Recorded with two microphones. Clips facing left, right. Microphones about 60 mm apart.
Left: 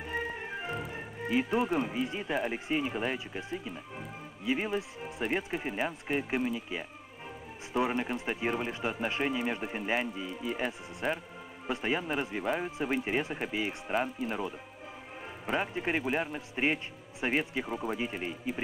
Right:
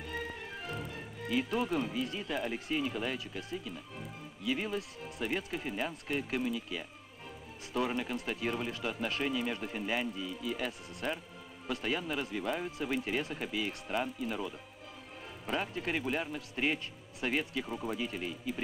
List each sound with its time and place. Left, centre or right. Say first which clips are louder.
0.0 s speech: left 5 dB; left
15.5 s speech: left 3 dB; left